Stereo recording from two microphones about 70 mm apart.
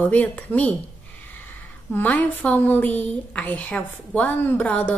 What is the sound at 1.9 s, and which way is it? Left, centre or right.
A woman's voice, left.